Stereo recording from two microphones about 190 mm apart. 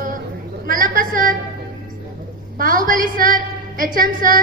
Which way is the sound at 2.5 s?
45° right (ahead or behind).